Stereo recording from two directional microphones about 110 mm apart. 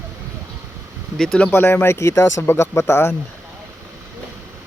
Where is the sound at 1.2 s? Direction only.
5° left (ahead or behind).